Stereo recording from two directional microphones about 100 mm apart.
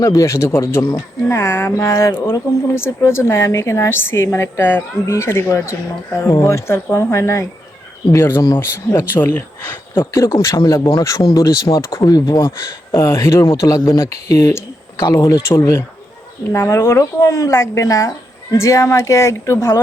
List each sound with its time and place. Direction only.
0.0 s speech: 35° left (ahead or behind); by 9.4 s 20° left (ahead or behind)
10.0 s speech: 30° left (ahead or behind)
12.5 s speech: 25° left (ahead or behind)